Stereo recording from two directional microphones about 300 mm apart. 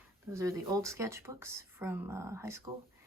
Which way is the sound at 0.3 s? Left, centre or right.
Centre.